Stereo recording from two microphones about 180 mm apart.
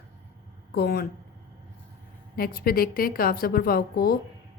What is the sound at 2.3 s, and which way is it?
A woman's voice, 55° left (ahead or behind).